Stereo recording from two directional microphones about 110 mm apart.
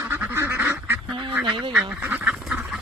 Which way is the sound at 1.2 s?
45° right (ahead or behind).